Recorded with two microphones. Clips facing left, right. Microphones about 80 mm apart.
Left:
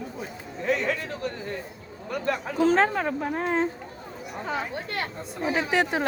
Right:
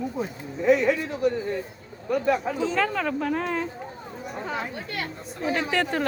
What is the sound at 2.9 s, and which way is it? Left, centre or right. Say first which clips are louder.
Speech: right 1 dB; left.